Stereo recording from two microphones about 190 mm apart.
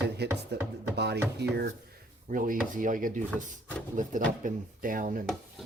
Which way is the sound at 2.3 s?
45° right (ahead or behind).